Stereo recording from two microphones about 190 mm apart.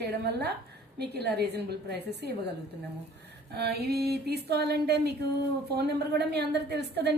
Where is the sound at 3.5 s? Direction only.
60° right (ahead or behind).